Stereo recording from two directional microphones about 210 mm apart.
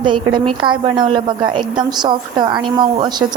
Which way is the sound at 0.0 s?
20° right (ahead or behind).